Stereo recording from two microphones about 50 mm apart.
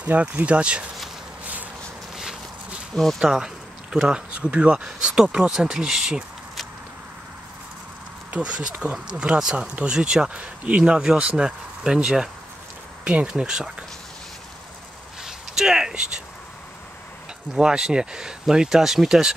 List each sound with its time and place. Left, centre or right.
0.0 s speech: right
3.2 s speech: centre
8.3 s speech: right
15.2 s a sound: centre
17.6 s speech: centre